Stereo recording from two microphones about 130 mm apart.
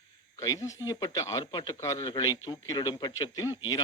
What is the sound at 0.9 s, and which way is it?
A man's voice, 25° left (ahead or behind).